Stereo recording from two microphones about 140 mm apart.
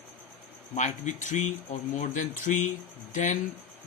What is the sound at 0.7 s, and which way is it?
Speech, 60° left (ahead or behind).